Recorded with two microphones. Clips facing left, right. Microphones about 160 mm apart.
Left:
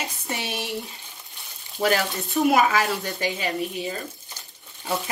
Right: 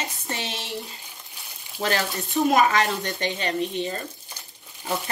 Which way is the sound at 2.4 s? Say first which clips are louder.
Even; 5° left (ahead or behind).